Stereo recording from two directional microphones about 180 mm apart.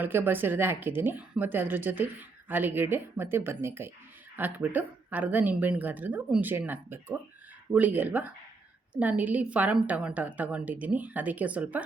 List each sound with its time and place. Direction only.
0.0 s a woman's voice: 10° right (ahead or behind)